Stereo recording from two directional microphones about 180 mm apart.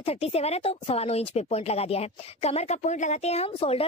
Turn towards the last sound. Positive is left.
turn(degrees=35)  # may be behind; listen again after turning